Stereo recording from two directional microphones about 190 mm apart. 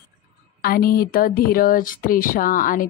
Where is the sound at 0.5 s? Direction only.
50° left (ahead or behind).